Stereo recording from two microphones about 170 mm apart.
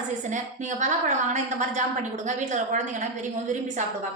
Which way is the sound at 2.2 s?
45° right (ahead or behind).